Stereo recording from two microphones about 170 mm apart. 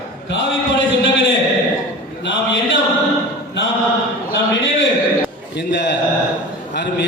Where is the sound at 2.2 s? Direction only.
90° left.